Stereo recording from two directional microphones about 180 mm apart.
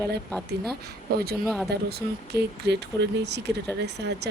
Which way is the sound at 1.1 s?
60° right (ahead or behind).